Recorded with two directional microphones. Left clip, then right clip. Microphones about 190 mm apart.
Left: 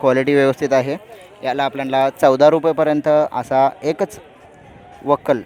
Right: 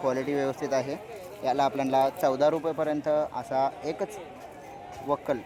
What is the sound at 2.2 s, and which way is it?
Speech, 35° left (ahead or behind).